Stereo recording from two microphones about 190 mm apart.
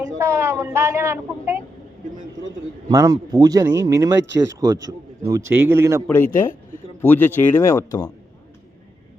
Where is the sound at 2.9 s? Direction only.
20° right (ahead or behind).